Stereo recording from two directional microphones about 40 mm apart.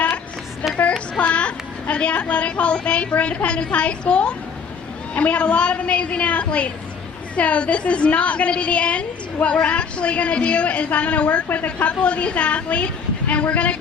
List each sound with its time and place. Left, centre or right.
0.8 s child singing: left
1.2 s a child's voice: left